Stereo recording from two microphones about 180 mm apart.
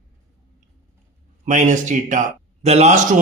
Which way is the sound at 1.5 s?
45° right (ahead or behind).